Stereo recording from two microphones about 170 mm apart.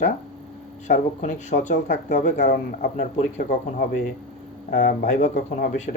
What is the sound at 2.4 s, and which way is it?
Speech, 60° left (ahead or behind).